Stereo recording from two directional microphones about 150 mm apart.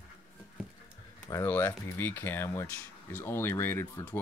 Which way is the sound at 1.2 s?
15° left (ahead or behind).